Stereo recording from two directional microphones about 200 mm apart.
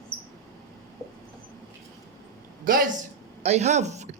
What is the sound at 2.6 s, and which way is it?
Speech, 45° right (ahead or behind).